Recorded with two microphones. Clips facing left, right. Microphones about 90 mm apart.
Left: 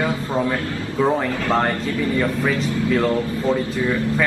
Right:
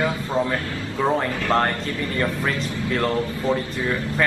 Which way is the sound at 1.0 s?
Centre (ahead or behind).